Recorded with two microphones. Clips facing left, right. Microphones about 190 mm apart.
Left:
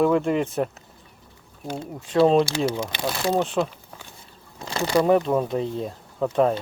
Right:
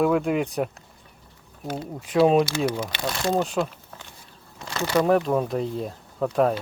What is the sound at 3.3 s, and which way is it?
Speech, centre (ahead or behind).